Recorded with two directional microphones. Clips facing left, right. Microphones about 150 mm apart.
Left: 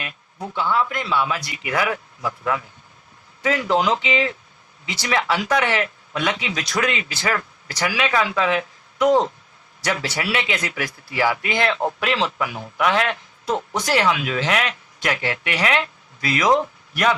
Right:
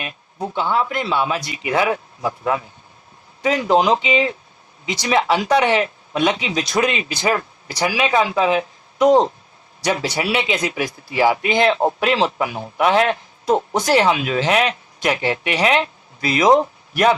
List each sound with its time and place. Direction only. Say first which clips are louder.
0.0 s speech: right 5 dB; 25° right (ahead or behind)